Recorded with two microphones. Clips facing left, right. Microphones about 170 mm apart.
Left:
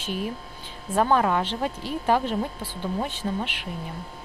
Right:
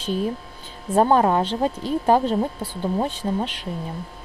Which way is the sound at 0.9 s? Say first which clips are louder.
Right 4 dB; 35° right (ahead or behind).